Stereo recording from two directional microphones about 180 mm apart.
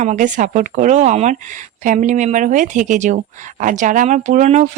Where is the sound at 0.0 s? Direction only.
40° right (ahead or behind).